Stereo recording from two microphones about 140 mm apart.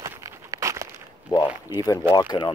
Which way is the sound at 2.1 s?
30° left (ahead or behind).